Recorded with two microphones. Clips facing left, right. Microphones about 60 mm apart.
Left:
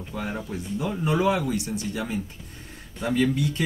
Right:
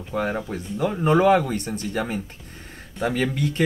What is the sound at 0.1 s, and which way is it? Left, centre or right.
Speech, right.